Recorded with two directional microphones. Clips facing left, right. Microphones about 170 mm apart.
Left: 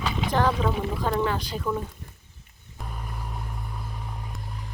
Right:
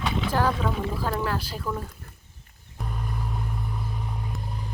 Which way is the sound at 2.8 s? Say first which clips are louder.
Right 4 dB; centre (ahead or behind).